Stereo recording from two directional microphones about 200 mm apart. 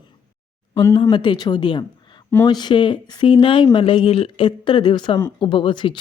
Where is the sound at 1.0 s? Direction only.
25° left (ahead or behind).